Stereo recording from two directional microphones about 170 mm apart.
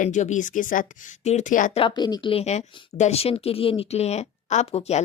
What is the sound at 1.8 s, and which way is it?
A woman's voice, 25° left (ahead or behind).